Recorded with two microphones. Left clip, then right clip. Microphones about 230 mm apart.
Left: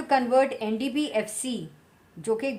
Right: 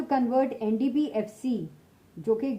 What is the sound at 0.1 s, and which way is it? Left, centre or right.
A woman's voice, centre.